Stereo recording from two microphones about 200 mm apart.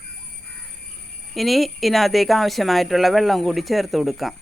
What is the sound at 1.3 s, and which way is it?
Speech, centre (ahead or behind).